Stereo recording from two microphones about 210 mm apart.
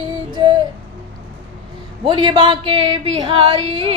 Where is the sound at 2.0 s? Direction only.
20° right (ahead or behind).